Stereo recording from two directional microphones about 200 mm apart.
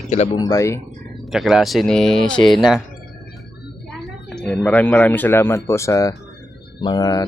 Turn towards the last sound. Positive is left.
turn(degrees=20)  # may be behind; listen again after turning